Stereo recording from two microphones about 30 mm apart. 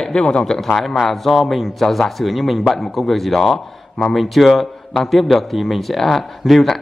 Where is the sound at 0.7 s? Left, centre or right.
Centre.